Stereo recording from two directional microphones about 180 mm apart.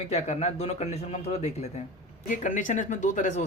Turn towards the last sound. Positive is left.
turn(degrees=40)  # may be behind; listen again after turning